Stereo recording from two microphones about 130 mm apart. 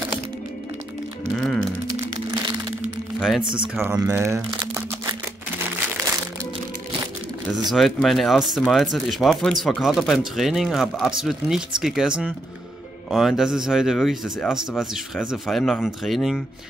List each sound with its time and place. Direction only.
1.3 s speech: 5° left (ahead or behind)
3.4 s speech: 40° right (ahead or behind)
3.8 s speech: 20° right (ahead or behind)
7.7 s speech: centre (ahead or behind)